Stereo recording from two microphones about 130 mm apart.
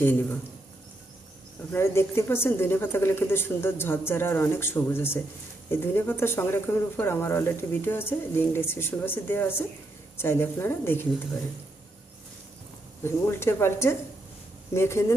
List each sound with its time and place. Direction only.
0.0 s speech: 15° left (ahead or behind)
1.7 s speech: 20° left (ahead or behind)
13.0 s speech: 20° left (ahead or behind)